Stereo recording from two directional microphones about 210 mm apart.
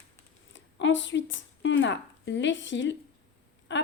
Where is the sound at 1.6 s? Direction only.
60° left (ahead or behind).